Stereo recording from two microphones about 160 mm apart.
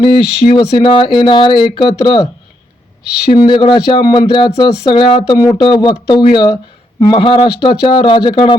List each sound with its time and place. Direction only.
0.0 s speech: 30° left (ahead or behind)
3.3 s speech: 30° left (ahead or behind)